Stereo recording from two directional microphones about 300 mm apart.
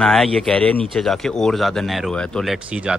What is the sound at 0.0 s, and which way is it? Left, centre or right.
Speech, centre.